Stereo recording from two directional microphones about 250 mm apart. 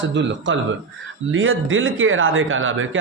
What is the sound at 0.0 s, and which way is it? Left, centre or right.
Speech, right.